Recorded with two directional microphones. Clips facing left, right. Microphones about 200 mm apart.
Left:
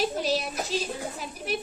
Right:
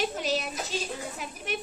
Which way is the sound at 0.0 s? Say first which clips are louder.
Left 2 dB; 35° left (ahead or behind).